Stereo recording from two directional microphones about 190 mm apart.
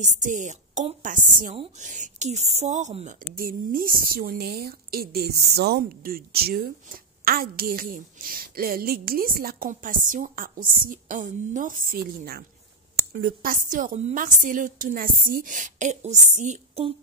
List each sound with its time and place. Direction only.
0.0 s a woman's voice: 40° right (ahead or behind)